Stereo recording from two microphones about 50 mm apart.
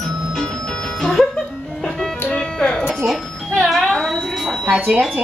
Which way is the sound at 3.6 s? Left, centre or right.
Centre.